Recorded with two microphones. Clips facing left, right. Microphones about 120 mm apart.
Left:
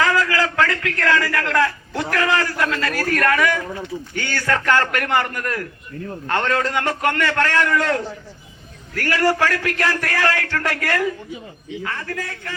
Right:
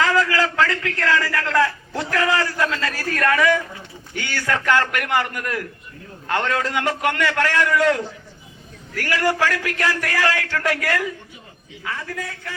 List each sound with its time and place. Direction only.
0.0 s a man's voice: 20° right (ahead or behind)